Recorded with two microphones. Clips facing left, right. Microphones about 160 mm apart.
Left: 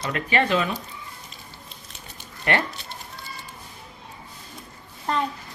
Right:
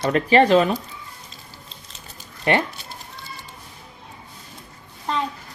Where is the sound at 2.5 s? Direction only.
20° right (ahead or behind).